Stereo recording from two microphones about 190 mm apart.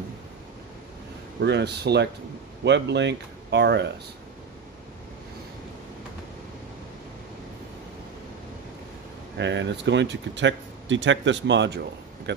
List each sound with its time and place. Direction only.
1.4 s speech: 65° right (ahead or behind)
9.4 s speech: 70° right (ahead or behind)